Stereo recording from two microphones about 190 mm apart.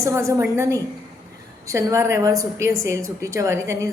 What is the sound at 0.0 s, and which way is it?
A woman's voice, 15° right (ahead or behind).